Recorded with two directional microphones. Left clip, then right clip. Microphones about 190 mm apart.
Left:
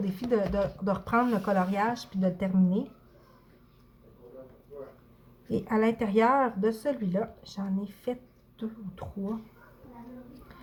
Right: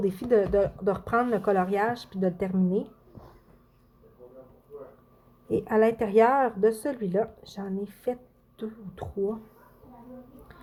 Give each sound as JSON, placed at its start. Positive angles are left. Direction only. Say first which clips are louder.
{"t": 0.0, "sound": "speech", "louder": "right 5 dB", "side_deg": -40}
{"t": 5.5, "sound": "speech", "louder": "right 5 dB", "side_deg": -40}